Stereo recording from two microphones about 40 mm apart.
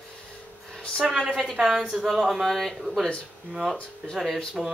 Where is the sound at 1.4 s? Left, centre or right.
Centre.